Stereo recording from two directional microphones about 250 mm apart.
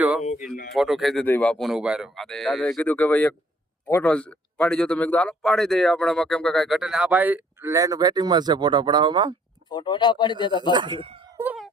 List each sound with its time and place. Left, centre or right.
0.2 s speech: left
0.7 s speech: centre
9.6 s speech: centre
10.7 s speech: centre
11.3 s cat: centre